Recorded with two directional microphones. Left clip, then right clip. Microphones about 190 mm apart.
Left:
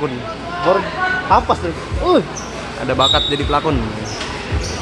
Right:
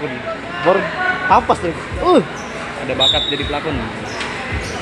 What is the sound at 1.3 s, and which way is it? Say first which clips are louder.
Speech: right 1 dB; 50° right (ahead or behind).